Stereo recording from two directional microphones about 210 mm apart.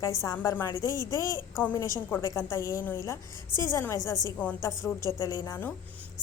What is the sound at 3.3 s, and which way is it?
Speech, 20° right (ahead or behind).